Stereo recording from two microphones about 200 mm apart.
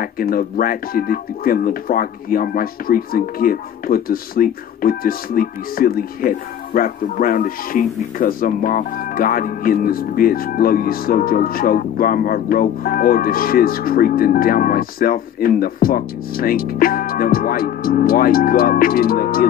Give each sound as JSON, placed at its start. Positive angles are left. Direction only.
{"t": 0.0, "sound": "speech", "side_deg": 45}